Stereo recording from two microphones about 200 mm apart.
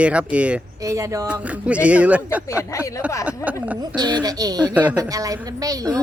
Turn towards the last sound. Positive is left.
turn(degrees=-15)  # may be behind; listen again after turning